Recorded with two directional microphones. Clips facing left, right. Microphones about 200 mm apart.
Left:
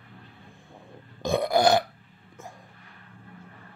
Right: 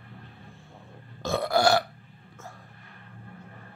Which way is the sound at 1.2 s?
15° left (ahead or behind).